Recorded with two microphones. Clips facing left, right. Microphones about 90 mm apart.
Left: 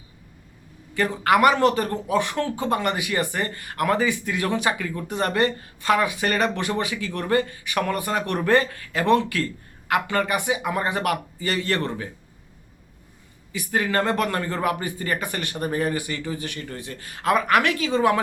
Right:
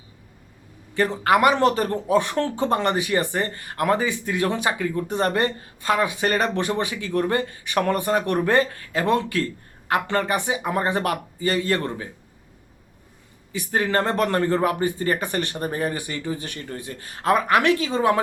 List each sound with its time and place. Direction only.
0.9 s speech: 25° right (ahead or behind)
8.7 s speech: 30° right (ahead or behind)
13.5 s speech: 30° right (ahead or behind)
17.1 s speech: 35° right (ahead or behind)